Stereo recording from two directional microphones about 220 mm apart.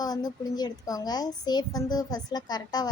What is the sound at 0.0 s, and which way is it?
A woman's voice, 15° left (ahead or behind).